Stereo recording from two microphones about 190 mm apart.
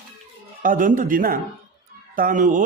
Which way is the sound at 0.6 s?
45° right (ahead or behind).